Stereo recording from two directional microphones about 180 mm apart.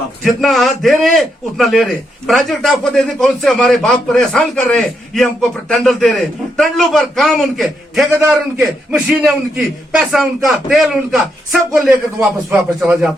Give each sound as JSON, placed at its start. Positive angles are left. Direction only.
{"t": 0.3, "sound": "a man's voice", "side_deg": 0}